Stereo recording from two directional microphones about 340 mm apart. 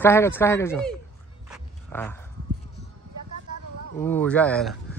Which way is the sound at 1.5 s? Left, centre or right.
Centre.